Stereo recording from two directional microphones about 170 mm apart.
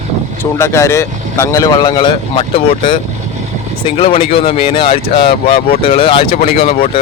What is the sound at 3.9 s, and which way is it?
Speech, 35° left (ahead or behind).